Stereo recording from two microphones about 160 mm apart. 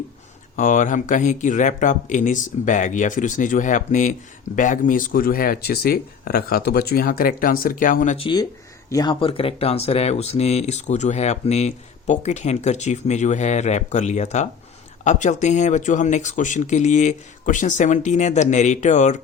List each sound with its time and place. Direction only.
0.5 s speech: 55° left (ahead or behind)
8.2 s speech: 25° left (ahead or behind); by 19.1 s 50° left (ahead or behind)